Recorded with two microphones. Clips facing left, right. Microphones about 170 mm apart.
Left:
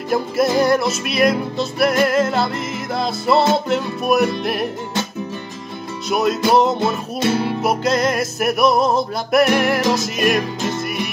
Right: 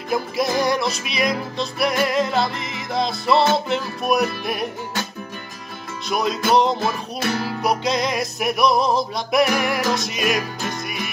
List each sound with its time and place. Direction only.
0.1 s music: centre (ahead or behind)
6.0 s music: centre (ahead or behind)
6.8 s music: 25° left (ahead or behind)
7.6 s music: centre (ahead or behind)